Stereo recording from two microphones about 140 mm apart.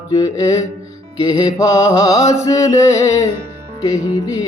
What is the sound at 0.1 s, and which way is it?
Mantra, 25° left (ahead or behind).